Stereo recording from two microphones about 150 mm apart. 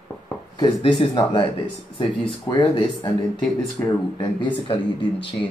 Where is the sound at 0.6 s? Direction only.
30° left (ahead or behind).